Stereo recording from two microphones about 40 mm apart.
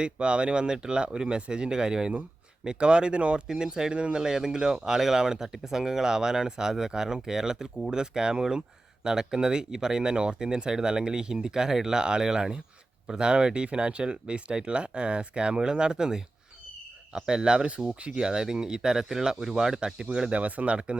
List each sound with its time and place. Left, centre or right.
0.0 s speech: right
3.4 s speech: centre
3.9 s speech: right
4.2 s speech: centre; by 20.9 s right